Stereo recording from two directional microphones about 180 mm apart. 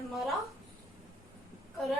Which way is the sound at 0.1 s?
Centre (ahead or behind).